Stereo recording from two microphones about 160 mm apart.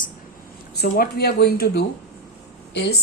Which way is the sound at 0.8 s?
80° left.